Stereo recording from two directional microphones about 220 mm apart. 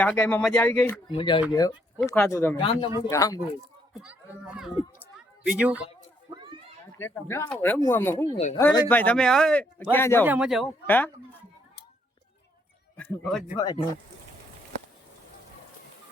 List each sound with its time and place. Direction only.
0.0 s speech: 5° left (ahead or behind)
1.1 s speech: 20° left (ahead or behind)
2.3 s speech: 10° left (ahead or behind)
2.6 s speech: 25° left (ahead or behind)
4.5 s a woman's voice: 5° right (ahead or behind)
6.3 s children playing: 20° right (ahead or behind)
7.0 s speech: 10° left (ahead or behind)
10.2 s speech: 5° right (ahead or behind)
13.0 s speech: 5° left (ahead or behind)
13.6 s speech: 20° left (ahead or behind)